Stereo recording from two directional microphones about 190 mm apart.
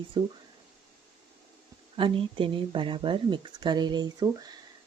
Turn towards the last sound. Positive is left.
turn(degrees=-20)  # may be behind; listen again after turning